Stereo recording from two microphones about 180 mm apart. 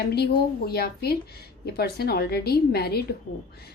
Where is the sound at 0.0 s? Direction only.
60° left (ahead or behind).